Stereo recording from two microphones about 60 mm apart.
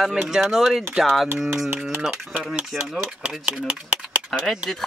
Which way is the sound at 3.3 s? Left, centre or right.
Centre.